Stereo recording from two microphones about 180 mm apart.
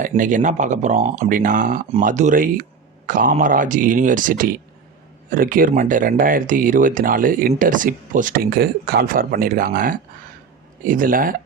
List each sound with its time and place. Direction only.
0.2 s speech: 45° right (ahead or behind)